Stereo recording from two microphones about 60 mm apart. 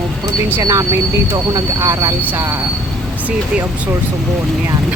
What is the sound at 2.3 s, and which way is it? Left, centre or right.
Speech, right.